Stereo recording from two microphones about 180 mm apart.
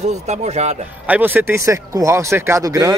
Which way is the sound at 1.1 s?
10° right (ahead or behind).